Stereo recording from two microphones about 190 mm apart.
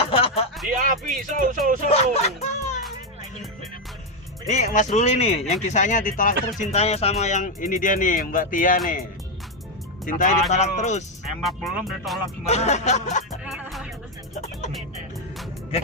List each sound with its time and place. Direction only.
0.1 s a sound: 30° left (ahead or behind)
0.8 s speech: 45° right (ahead or behind)
1.9 s speech: 35° left (ahead or behind)
4.4 s speech: 40° left (ahead or behind)
10.1 s speech: 40° left (ahead or behind)
11.3 s speech: centre (ahead or behind)
12.5 s speech: 35° left (ahead or behind)
13.4 s music: 5° right (ahead or behind)